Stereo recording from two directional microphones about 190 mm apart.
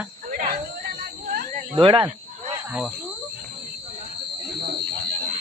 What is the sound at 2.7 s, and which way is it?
Speech, 5° right (ahead or behind).